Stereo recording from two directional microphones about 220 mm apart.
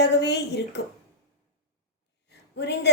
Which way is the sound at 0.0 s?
50° left (ahead or behind).